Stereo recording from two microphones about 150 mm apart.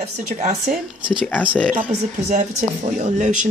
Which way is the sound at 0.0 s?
50° right (ahead or behind).